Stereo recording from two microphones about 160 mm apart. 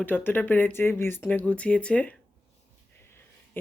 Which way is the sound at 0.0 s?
10° left (ahead or behind).